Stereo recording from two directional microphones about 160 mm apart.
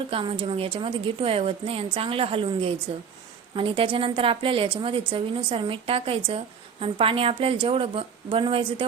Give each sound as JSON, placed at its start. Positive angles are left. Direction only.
{"t": 0.1, "sound": "a woman's voice", "side_deg": -35}